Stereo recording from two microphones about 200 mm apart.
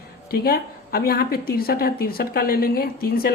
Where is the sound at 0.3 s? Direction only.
50° left (ahead or behind).